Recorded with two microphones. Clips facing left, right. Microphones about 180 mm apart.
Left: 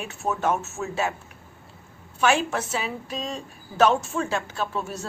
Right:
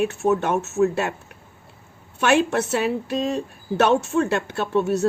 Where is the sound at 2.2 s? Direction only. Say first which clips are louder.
Right 4 dB; 65° right (ahead or behind).